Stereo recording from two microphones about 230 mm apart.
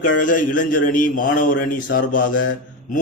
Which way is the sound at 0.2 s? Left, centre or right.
Left.